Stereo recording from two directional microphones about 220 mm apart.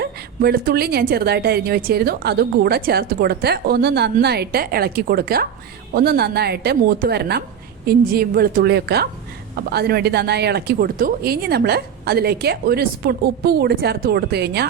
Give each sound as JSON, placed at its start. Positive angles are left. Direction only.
{"t": 0.0, "sound": "a woman's voice", "side_deg": -45}